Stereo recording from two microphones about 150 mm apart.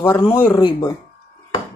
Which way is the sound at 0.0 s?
25° left (ahead or behind).